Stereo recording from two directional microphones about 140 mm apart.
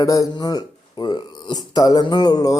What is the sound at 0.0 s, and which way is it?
Speech, 25° left (ahead or behind).